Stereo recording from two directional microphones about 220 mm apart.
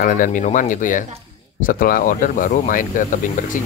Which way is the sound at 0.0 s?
40° left (ahead or behind).